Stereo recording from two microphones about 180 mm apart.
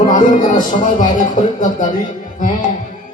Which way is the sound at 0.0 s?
45° left (ahead or behind).